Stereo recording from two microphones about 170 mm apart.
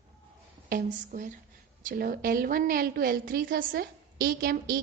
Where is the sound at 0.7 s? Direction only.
50° right (ahead or behind).